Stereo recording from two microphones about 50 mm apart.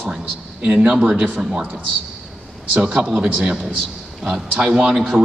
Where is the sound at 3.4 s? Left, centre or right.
Centre.